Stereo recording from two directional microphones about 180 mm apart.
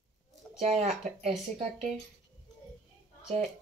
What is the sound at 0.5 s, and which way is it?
Speech, 35° right (ahead or behind).